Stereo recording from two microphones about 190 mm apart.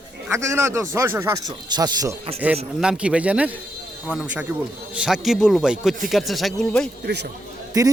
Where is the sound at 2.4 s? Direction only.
10° right (ahead or behind).